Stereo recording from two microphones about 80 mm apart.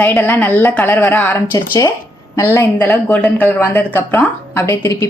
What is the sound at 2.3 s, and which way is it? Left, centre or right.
A woman's voice, left.